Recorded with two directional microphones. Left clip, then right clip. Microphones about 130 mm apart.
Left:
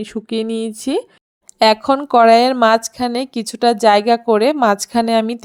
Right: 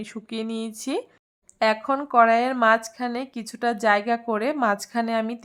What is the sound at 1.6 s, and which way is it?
A woman's voice, 50° left (ahead or behind).